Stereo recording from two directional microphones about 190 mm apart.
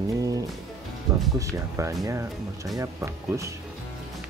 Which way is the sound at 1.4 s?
15° right (ahead or behind).